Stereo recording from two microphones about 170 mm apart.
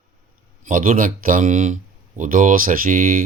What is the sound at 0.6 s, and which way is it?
Speech, 50° right (ahead or behind).